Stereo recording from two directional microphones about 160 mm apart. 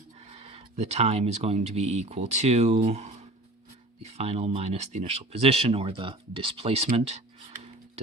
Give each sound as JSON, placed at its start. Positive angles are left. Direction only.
{"t": 0.3, "sound": "speech", "side_deg": -40}